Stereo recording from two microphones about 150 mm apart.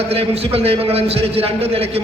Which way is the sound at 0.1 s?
40° right (ahead or behind).